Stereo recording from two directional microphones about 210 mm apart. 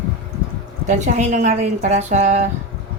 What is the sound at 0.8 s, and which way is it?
A woman's voice, 35° right (ahead or behind).